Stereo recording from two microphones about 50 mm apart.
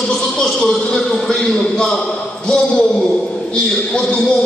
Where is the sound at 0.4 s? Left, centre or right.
Centre.